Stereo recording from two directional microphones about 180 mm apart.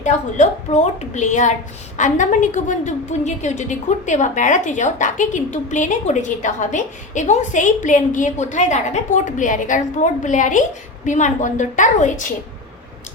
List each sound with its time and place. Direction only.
0.0 s a woman's voice: 40° left (ahead or behind)